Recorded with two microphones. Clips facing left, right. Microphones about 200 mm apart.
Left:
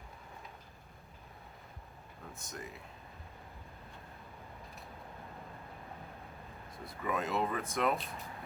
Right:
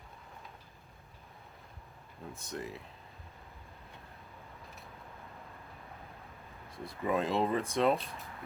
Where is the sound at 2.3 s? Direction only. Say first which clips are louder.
Right 6 dB; 30° right (ahead or behind).